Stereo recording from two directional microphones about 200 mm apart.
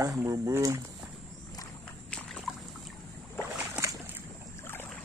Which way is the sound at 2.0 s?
5° left (ahead or behind).